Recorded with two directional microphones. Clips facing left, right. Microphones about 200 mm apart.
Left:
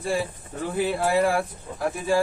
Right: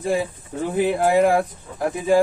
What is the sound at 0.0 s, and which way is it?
Speech, 20° right (ahead or behind).